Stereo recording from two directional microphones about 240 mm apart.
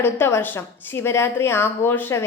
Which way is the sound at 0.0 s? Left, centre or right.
Centre.